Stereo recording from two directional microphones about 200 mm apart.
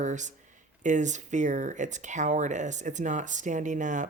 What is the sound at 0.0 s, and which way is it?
Speech, 35° right (ahead or behind).